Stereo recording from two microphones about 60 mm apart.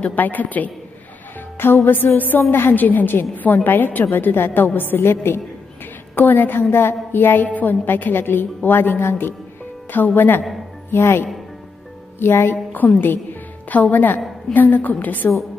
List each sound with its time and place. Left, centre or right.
0.0 s a woman's voice: left
1.6 s a woman's voice: left
6.1 s a woman's voice: left